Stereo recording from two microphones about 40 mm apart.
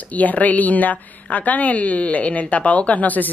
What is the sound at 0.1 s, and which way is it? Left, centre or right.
A woman's voice, left.